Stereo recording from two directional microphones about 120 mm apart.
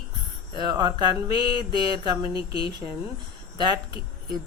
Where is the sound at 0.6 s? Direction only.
35° right (ahead or behind).